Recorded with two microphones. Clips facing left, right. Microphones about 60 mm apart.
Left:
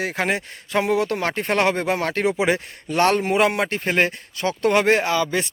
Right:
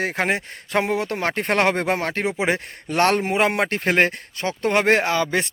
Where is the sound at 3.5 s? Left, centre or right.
Right.